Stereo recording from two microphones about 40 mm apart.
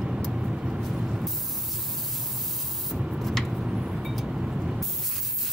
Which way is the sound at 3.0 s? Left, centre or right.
Centre.